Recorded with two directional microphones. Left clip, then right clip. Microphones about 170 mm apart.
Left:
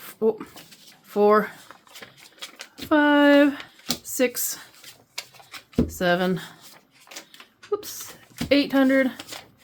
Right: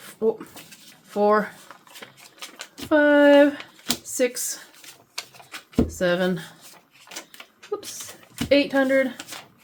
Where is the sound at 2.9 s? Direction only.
35° left (ahead or behind).